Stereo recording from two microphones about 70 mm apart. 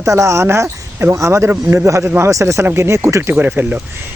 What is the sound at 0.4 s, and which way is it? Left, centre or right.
Speech, right.